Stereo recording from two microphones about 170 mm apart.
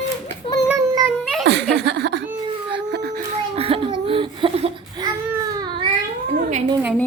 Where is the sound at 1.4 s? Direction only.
90° right.